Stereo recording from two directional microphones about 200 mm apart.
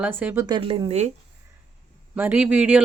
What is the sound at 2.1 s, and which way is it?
Speech, 5° right (ahead or behind).